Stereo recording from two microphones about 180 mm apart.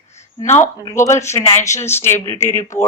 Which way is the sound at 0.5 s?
15° left (ahead or behind).